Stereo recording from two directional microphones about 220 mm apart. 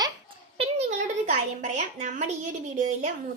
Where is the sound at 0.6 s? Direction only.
30° right (ahead or behind).